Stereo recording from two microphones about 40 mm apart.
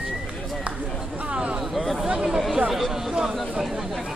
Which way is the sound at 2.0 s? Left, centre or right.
Centre.